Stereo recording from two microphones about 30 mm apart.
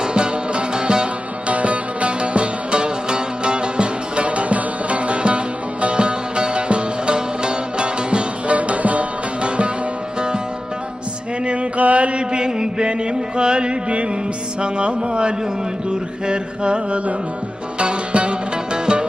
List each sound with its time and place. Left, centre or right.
0.0 s music: right
1.5 s music: right
8.5 s music: right
9.4 s music: right
11.4 s music: right
11.8 s mantra: right
12.3 s chant: right
14.6 s a sound: right
15.9 s mantra: right
17.7 s music: right